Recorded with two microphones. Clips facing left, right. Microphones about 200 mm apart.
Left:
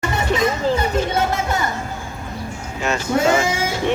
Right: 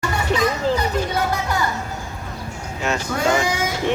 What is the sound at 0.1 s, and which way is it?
Children playing, 25° left (ahead or behind).